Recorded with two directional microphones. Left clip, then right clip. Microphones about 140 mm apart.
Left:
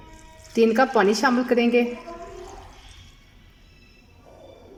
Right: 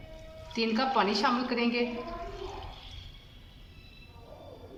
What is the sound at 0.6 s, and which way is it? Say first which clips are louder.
Speech: left 9 dB; 65° left (ahead or behind).